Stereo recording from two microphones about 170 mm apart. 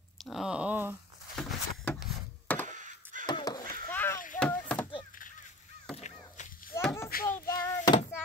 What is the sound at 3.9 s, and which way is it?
Rowboat, 10° left (ahead or behind).